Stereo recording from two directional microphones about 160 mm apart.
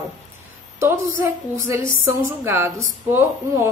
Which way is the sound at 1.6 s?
15° right (ahead or behind).